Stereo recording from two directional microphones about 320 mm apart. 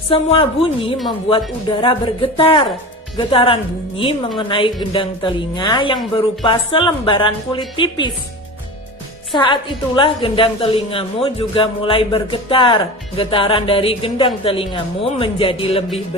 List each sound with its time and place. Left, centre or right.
0.1 s a woman's voice: centre
9.3 s a woman's voice: centre